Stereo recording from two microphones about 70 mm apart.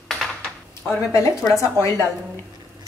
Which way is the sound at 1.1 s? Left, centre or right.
Left.